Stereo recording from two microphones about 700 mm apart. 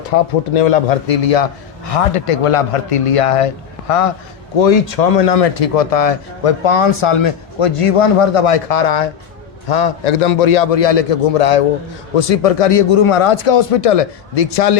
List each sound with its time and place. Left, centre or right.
0.1 s a man's voice: left
4.5 s a man's voice: left